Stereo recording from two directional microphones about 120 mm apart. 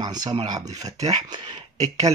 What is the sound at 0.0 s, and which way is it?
Speech, 35° right (ahead or behind).